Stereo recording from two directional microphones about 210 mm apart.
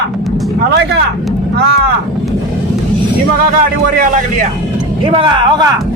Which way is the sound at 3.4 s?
40° right (ahead or behind).